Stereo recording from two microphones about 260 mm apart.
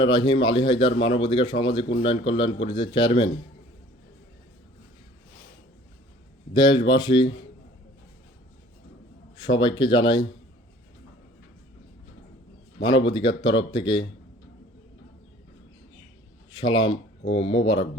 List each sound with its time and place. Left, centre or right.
0.0 s speech: centre
6.5 s speech: centre
9.4 s speech: centre
12.8 s speech: centre
16.5 s speech: centre